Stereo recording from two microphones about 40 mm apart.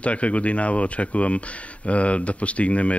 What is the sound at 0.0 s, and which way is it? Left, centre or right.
Speech, left.